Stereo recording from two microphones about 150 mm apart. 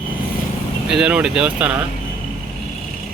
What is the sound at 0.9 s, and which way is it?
Speech, 5° right (ahead or behind).